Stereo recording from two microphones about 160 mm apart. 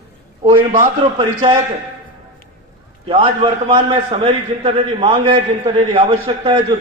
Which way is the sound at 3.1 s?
35° right (ahead or behind).